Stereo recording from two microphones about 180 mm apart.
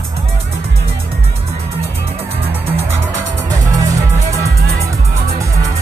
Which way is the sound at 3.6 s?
20° right (ahead or behind).